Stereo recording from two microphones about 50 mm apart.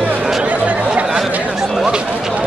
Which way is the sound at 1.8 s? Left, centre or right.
Centre.